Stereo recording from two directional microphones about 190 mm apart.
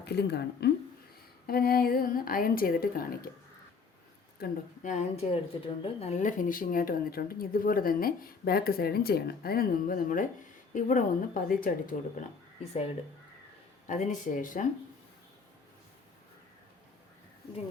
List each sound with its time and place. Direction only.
0.0 s a woman's voice: 60° left (ahead or behind)
4.4 s a woman's voice: 40° left (ahead or behind)
13.8 s speech: 40° left (ahead or behind)